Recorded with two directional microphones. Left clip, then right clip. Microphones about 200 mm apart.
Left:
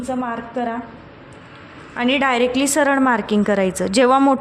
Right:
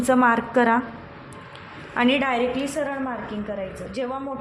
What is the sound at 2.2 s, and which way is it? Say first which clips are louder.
A woman's voice: left 6 dB; 30° left (ahead or behind).